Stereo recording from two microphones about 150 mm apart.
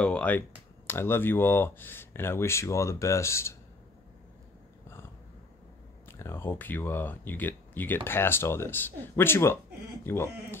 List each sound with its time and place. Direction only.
0.0 s a sound: 10° left (ahead or behind)
0.8 s speech: 15° left (ahead or behind)
6.0 s speech: 15° left (ahead or behind)